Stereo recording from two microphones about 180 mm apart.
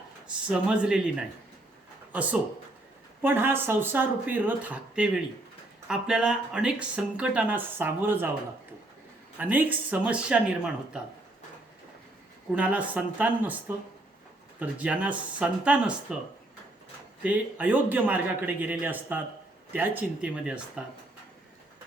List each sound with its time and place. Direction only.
0.4 s speech: 5° right (ahead or behind)
3.2 s speech: 10° right (ahead or behind)
9.4 s speech: 10° right (ahead or behind)
12.5 s speech: 5° right (ahead or behind)
17.2 s speech: 10° right (ahead or behind)